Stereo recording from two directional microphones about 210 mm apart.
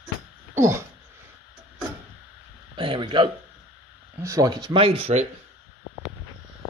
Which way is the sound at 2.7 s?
25° right (ahead or behind).